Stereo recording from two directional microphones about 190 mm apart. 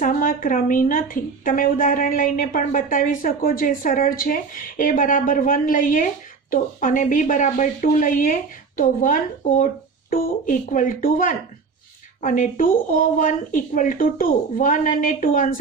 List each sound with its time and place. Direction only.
0.0 s a woman's voice: 45° left (ahead or behind)